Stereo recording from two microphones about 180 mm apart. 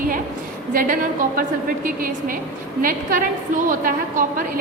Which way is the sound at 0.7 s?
50° right (ahead or behind).